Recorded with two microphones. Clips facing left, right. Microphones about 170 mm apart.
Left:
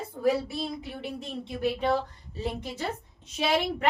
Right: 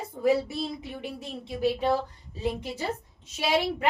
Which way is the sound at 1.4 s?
5° right (ahead or behind).